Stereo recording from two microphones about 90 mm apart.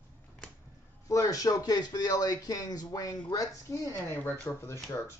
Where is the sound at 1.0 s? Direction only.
40° left (ahead or behind).